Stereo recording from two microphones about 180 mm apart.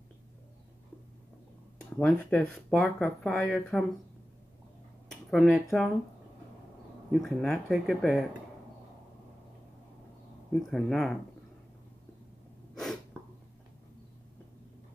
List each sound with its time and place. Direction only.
2.0 s speech: 5° left (ahead or behind)
5.1 s speech: centre (ahead or behind)
7.1 s speech: centre (ahead or behind)
10.5 s speech: centre (ahead or behind)